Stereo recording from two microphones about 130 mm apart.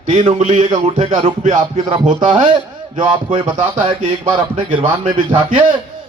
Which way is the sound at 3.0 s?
40° right (ahead or behind).